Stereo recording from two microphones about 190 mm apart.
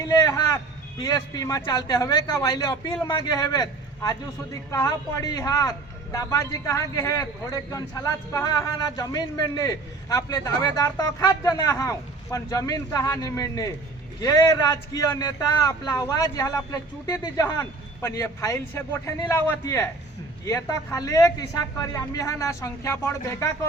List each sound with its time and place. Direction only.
0.1 s vehicle: 20° left (ahead or behind)
1.0 s a man's voice: 20° left (ahead or behind)